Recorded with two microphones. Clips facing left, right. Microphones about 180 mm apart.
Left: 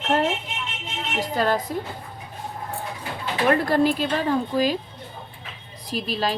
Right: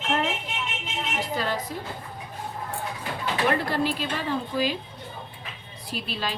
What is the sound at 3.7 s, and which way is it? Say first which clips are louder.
Speech: left 6 dB; 45° left (ahead or behind).